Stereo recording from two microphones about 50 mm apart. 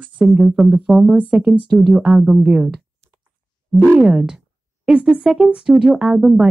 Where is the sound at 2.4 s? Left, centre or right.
Right.